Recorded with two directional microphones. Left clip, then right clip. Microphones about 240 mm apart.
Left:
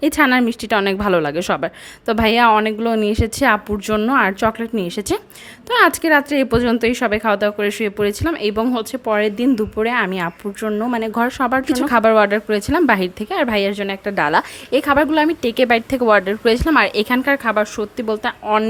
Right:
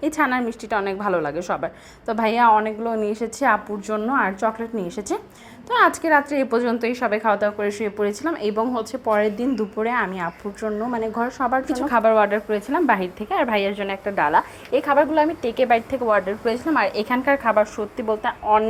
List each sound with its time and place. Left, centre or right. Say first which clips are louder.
0.0 s a woman's voice: left 6 dB; left